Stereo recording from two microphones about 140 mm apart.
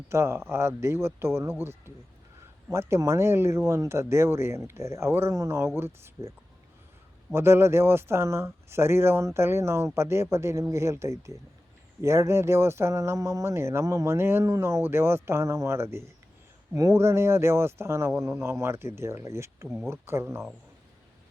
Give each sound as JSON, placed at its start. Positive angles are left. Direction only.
{"t": 0.1, "sound": "speech", "side_deg": -20}
{"t": 7.3, "sound": "speech", "side_deg": -20}